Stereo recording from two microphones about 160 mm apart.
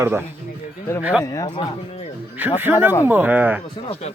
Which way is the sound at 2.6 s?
10° right (ahead or behind).